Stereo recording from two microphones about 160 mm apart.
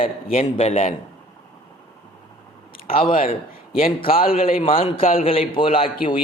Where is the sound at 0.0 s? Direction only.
40° left (ahead or behind).